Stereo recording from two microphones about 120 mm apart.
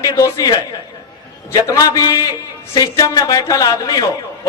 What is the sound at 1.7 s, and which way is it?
Speech, 25° left (ahead or behind).